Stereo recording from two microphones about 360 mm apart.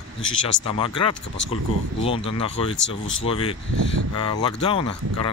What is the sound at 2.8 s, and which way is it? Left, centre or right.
Speech, left.